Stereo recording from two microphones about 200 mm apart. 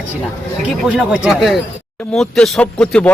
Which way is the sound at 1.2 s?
Centre (ahead or behind).